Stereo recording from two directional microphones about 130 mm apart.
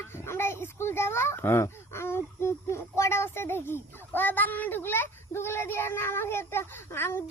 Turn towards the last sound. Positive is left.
turn(degrees=20)  # may be behind; listen again after turning